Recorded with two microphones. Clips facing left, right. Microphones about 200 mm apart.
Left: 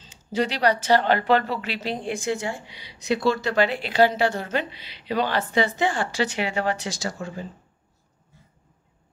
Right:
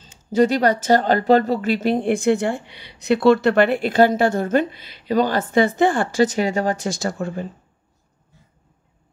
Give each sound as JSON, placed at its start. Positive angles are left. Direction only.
{"t": 0.0, "sound": "speech", "side_deg": -45}